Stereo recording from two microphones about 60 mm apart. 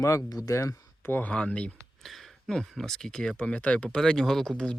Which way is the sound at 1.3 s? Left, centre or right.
Centre.